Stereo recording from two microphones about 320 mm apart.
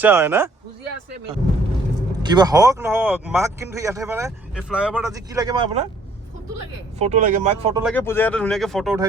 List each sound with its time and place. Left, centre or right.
0.0 s speech: centre
2.2 s speech: centre
7.0 s speech: right
7.8 s speech: centre